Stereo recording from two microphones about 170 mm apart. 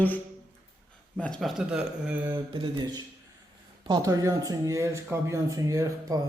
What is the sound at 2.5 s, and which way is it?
Speech, 30° right (ahead or behind).